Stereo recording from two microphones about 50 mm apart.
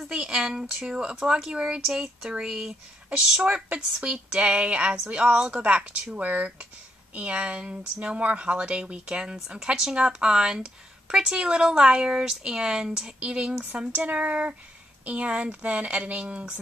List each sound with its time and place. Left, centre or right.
0.1 s a sound: centre
0.4 s speech: centre
3.4 s speech: right